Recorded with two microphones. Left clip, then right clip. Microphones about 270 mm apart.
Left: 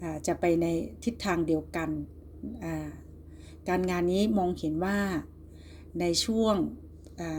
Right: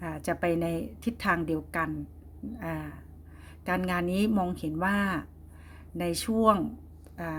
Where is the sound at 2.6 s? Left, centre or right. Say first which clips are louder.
Even; right.